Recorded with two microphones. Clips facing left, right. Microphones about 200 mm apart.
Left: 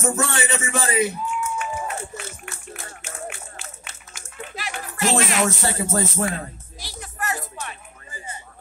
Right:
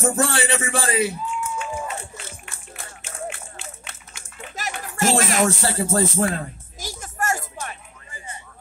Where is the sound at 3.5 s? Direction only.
60° right (ahead or behind); by 6.1 s 35° right (ahead or behind).